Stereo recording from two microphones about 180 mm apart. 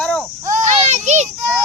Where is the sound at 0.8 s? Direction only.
40° right (ahead or behind).